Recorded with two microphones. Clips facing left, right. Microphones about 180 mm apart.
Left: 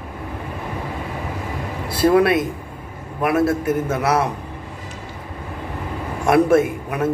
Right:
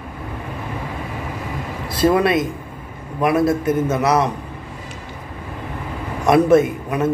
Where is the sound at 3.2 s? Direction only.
5° left (ahead or behind).